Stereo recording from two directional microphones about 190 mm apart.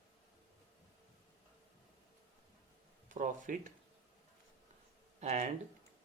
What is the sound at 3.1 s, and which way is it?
Speech, 45° right (ahead or behind).